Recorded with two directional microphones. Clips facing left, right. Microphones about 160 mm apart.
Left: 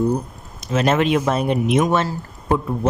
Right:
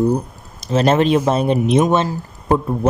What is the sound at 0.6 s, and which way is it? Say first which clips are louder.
Speech: right 3 dB; 35° right (ahead or behind).